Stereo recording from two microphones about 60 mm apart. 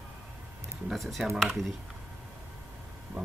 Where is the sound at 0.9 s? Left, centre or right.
Centre.